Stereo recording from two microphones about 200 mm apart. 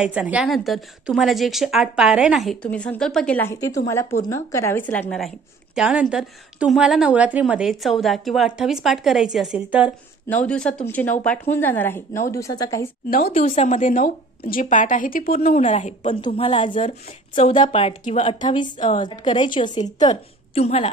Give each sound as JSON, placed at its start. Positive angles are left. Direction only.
{"t": 0.0, "sound": "a woman's voice", "side_deg": -5}
{"t": 10.2, "sound": "a woman's voice", "side_deg": 5}
{"t": 13.3, "sound": "a woman's voice", "side_deg": 30}
{"t": 15.4, "sound": "a woman's voice", "side_deg": 35}